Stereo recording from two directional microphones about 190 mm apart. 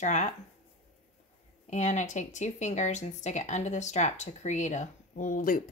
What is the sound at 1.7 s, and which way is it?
Speech, 40° left (ahead or behind).